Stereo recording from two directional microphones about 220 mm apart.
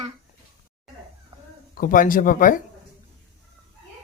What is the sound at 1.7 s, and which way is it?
Speech, 40° left (ahead or behind).